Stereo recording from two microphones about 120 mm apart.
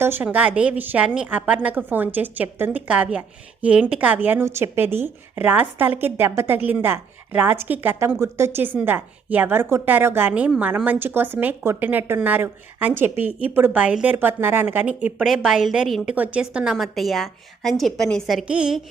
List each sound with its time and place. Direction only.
0.0 s a woman's voice: 15° right (ahead or behind)